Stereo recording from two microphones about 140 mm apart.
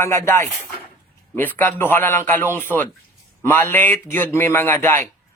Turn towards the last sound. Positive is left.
turn(degrees=15)  # may be behind; listen again after turning